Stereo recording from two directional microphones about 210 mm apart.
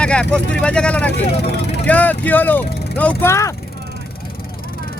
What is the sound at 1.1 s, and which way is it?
Speech, 55° left (ahead or behind).